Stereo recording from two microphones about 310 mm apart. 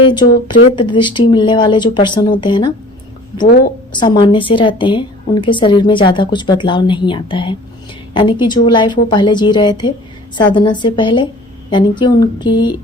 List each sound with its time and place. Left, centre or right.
0.0 s a woman's voice: centre
4.0 s a woman's voice: centre